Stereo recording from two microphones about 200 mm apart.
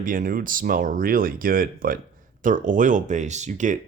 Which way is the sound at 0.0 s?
45° right (ahead or behind).